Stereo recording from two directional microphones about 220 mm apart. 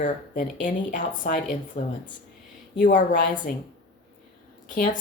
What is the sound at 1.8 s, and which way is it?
A woman's voice, 35° left (ahead or behind).